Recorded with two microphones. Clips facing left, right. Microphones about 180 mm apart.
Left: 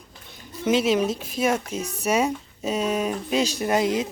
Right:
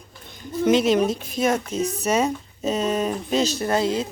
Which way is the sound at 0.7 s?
5° left (ahead or behind).